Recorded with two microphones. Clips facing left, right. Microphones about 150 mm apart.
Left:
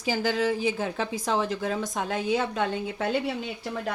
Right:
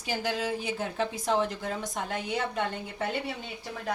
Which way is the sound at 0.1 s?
90° left.